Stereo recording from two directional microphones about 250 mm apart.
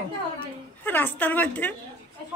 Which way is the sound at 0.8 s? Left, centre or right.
Centre.